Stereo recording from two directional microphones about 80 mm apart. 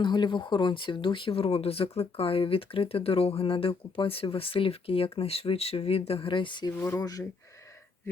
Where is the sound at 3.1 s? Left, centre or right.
Left.